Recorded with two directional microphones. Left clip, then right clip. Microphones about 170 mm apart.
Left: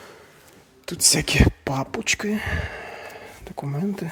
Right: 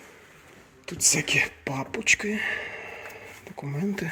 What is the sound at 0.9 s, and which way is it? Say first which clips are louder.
Speech: left 3 dB; 35° left (ahead or behind).